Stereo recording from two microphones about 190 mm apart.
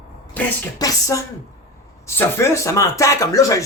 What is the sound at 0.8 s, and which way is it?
Speech, 15° left (ahead or behind).